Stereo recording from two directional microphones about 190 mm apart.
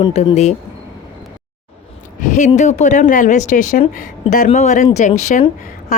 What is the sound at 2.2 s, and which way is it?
A woman's voice, 40° left (ahead or behind).